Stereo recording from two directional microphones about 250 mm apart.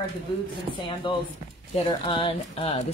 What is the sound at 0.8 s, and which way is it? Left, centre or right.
Speech, centre.